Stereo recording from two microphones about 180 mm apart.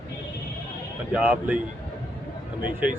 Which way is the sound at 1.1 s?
5° right (ahead or behind).